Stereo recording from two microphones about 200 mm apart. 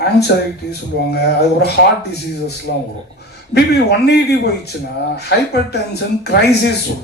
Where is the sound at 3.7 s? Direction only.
55° left (ahead or behind).